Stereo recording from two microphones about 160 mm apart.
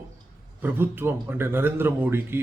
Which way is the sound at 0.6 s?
15° right (ahead or behind).